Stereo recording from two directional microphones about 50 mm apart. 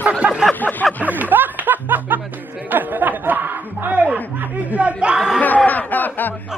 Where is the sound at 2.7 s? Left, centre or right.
Right; by 5.4 s centre.